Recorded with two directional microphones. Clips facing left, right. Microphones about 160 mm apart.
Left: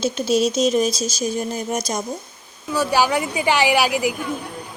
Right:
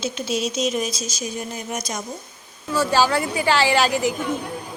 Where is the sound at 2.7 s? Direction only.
15° left (ahead or behind).